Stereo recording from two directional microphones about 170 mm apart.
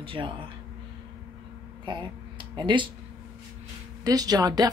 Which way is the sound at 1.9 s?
25° right (ahead or behind).